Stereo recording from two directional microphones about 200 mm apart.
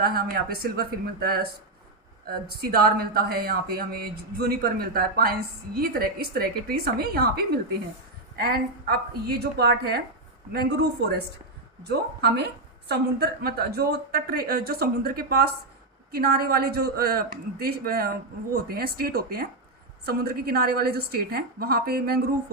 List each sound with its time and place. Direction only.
0.0 s a woman's voice: 50° right (ahead or behind)